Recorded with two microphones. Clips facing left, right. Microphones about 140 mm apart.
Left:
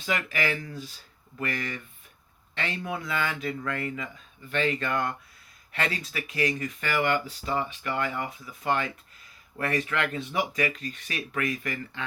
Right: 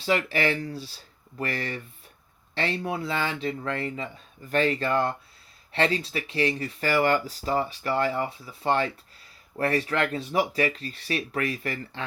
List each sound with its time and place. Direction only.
0.0 s speech: 35° right (ahead or behind)